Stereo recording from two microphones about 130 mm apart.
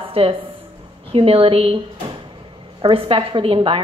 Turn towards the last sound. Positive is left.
turn(degrees=-40)  # may be behind; listen again after turning